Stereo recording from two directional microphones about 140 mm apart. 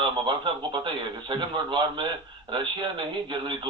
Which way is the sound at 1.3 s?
35° right (ahead or behind).